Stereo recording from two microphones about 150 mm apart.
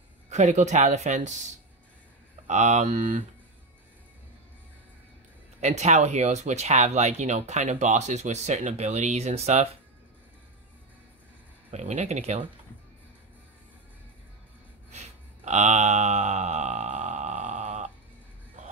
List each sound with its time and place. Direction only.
0.3 s speech: 50° right (ahead or behind)
5.6 s speech: 50° right (ahead or behind)
11.7 s speech: 50° right (ahead or behind)
14.9 s a sound: 50° right (ahead or behind)